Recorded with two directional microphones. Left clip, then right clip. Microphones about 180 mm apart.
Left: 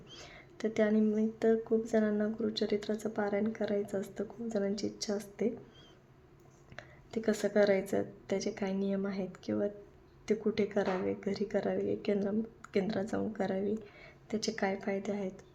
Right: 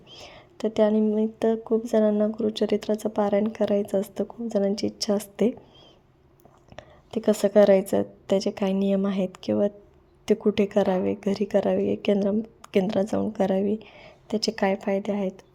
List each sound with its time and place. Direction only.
0.1 s a sound: 25° right (ahead or behind)
1.4 s speech: 35° right (ahead or behind)
6.7 s speech: 30° right (ahead or behind)